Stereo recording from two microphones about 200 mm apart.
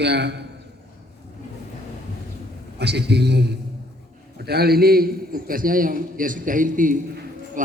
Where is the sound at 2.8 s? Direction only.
55° right (ahead or behind).